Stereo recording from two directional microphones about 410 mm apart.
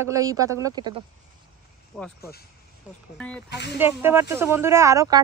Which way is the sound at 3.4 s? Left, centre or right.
Left.